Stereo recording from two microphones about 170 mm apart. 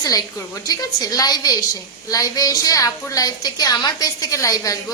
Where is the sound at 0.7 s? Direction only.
20° left (ahead or behind).